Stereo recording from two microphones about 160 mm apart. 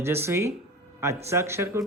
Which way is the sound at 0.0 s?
15° right (ahead or behind).